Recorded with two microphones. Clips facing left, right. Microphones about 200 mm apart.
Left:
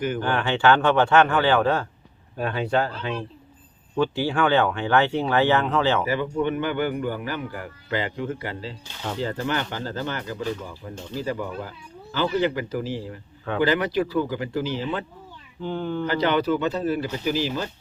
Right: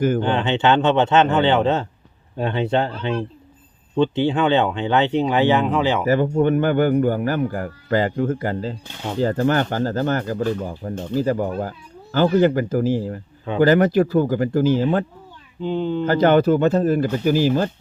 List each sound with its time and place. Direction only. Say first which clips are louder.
0.2 s speech: right 3 dB; 20° right (ahead or behind)
6.1 s speech: right 7 dB; 50° right (ahead or behind)
15.6 s speech: right 5 dB; 20° right (ahead or behind)
16.0 s speech: right 7 dB; 50° right (ahead or behind)